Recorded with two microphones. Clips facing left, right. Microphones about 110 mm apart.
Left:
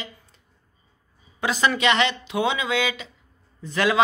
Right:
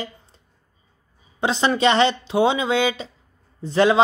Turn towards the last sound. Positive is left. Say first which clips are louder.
# right 6 dB
turn(degrees=-30)  # may be behind; listen again after turning